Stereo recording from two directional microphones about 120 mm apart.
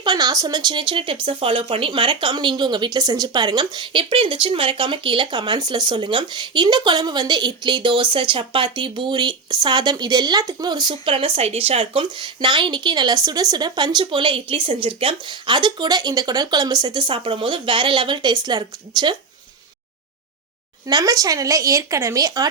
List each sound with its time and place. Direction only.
0.0 s speech: 35° right (ahead or behind)
20.8 s speech: 30° right (ahead or behind)